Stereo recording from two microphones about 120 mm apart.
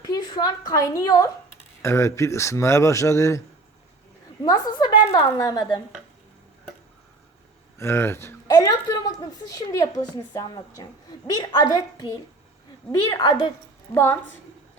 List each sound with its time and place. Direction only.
0.0 s a woman's voice: 35° left (ahead or behind)
4.4 s a woman's voice: 30° left (ahead or behind)
7.8 s a woman's voice: 20° left (ahead or behind)
13.9 s a woman's voice: 20° left (ahead or behind)